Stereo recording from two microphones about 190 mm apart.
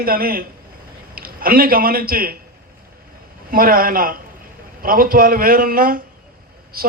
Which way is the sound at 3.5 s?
50° right (ahead or behind).